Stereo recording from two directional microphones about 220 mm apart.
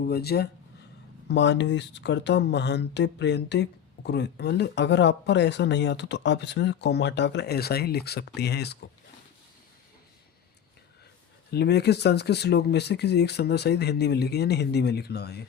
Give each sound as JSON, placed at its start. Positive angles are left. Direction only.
{"t": 0.0, "sound": "speech", "side_deg": 45}
{"t": 11.5, "sound": "speech", "side_deg": 50}